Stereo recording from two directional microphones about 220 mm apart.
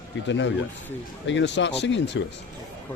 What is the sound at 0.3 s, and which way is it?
Speech, 55° left (ahead or behind).